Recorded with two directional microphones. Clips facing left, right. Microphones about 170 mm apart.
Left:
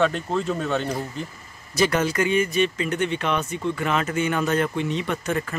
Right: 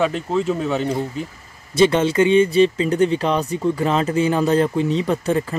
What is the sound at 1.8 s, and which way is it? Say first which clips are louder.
Speech: right 6 dB; 25° right (ahead or behind).